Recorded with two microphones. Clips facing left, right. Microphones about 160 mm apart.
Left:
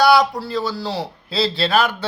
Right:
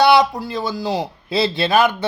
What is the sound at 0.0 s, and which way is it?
Speech, 20° right (ahead or behind).